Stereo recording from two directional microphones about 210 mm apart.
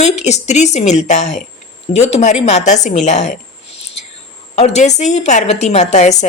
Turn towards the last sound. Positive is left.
turn(degrees=35)  # may be behind; listen again after turning